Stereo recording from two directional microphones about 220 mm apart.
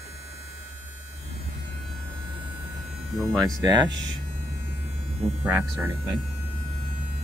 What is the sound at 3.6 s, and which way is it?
Speech, 20° right (ahead or behind).